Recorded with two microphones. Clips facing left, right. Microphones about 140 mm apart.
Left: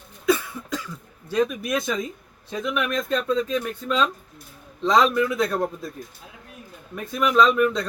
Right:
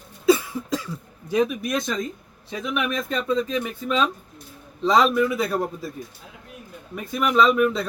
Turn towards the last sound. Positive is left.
turn(degrees=-5)  # may be behind; listen again after turning